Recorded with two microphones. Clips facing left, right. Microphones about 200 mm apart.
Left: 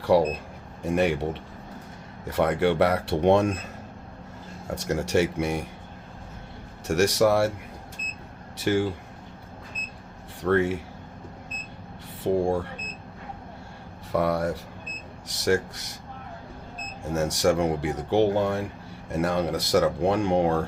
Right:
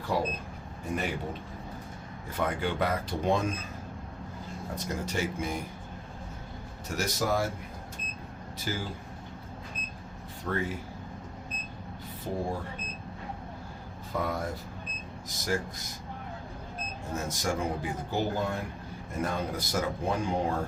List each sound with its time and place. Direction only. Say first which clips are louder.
0.0 s speech: left 10 dB; 75° left (ahead or behind)
4.7 s speech: left 10 dB; 80° left
6.8 s speech: left 10 dB; 75° left (ahead or behind)
8.5 s speech: left 12 dB; 75° left (ahead or behind)
10.4 s speech: left 10 dB; 70° left (ahead or behind)
12.2 s speech: left 10 dB; 75° left (ahead or behind)
14.1 s speech: left 8 dB; 75° left (ahead or behind)
17.1 s speech: left 10 dB; 75° left (ahead or behind)